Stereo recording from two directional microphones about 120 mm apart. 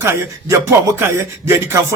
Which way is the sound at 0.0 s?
25° right (ahead or behind).